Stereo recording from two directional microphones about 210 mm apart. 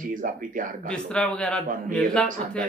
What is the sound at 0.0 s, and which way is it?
Speech, 40° right (ahead or behind).